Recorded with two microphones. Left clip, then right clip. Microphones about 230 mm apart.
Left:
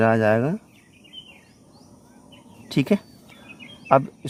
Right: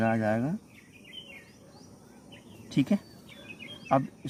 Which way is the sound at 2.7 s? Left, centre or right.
Left.